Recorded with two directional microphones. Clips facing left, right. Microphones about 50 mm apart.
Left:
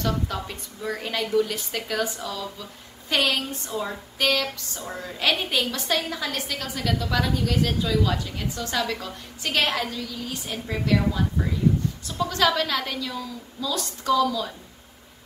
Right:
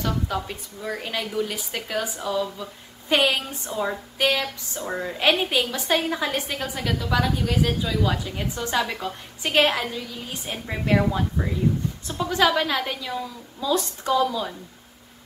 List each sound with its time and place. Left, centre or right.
0.0 s a woman's voice: centre; by 11.0 s right
12.2 s a woman's voice: centre